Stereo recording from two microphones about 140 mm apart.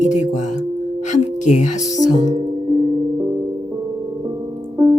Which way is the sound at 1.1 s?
60° left (ahead or behind).